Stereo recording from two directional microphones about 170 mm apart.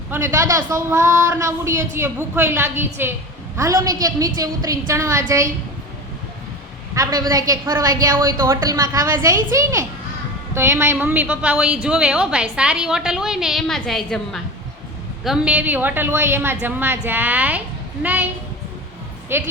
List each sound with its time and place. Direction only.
0.1 s a woman's voice: 15° right (ahead or behind)
6.9 s a woman's voice: 20° right (ahead or behind)
19.3 s a woman's voice: 15° right (ahead or behind)